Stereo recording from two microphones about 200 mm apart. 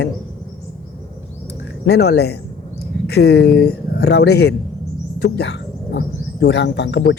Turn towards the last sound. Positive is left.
turn(degrees=55)  # may be behind; listen again after turning